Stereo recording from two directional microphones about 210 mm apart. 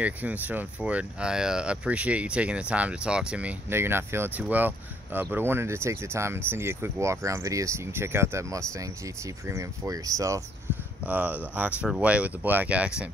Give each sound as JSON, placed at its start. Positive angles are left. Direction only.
{"t": 0.0, "sound": "speech", "side_deg": -5}